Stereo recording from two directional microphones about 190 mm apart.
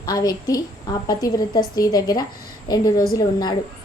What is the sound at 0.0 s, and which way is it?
A woman's voice, 20° left (ahead or behind).